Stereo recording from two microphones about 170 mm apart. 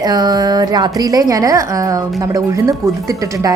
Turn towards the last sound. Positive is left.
turn(degrees=-20)  # may be behind; listen again after turning